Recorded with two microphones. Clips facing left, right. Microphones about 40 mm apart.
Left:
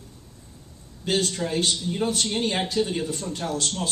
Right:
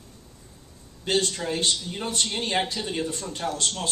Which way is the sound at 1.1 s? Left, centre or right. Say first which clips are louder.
Even; centre.